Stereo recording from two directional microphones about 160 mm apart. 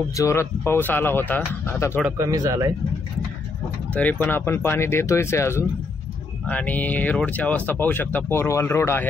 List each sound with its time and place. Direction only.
0.1 s speech: 20° left (ahead or behind)
2.0 s speech: 20° right (ahead or behind)
3.9 s speech: 10° left (ahead or behind)